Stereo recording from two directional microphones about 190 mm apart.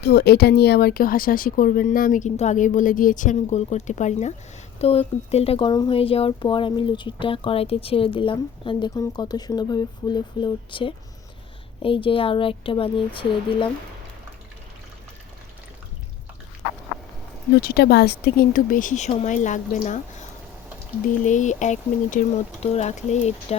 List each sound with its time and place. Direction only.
0.0 s speech: 60° left (ahead or behind); by 13.7 s 25° left (ahead or behind)
17.6 s speech: 55° left (ahead or behind); by 20.0 s 40° left (ahead or behind)
21.2 s speech: 40° left (ahead or behind)